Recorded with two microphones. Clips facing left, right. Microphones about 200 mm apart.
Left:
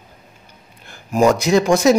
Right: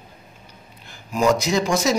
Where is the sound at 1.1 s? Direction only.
55° left (ahead or behind).